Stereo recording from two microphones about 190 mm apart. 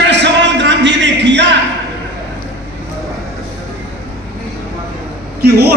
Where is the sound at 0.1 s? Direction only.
65° right (ahead or behind).